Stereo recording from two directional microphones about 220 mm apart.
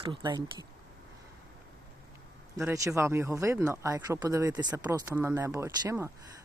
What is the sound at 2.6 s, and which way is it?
Speech, 10° right (ahead or behind).